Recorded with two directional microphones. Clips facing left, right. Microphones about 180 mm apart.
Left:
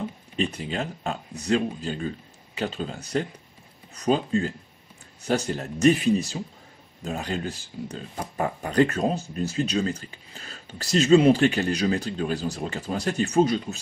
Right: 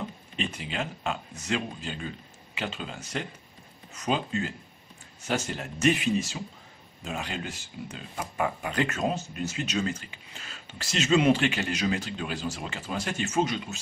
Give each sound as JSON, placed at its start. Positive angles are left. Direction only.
{"t": 0.4, "sound": "speech", "side_deg": 40}